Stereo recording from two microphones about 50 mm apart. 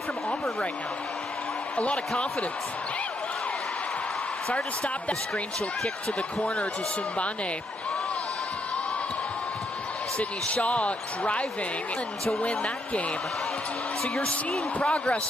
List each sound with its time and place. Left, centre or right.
1.8 s speech: left
6.4 s speech: left
10.1 s speech: left
14.0 s speech: centre
14.8 s speech: left